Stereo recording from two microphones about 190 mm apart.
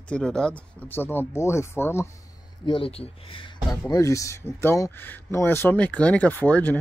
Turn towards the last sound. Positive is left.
turn(degrees=10)  # may be behind; listen again after turning